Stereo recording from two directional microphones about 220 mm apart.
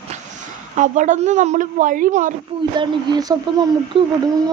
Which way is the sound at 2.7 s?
20° right (ahead or behind).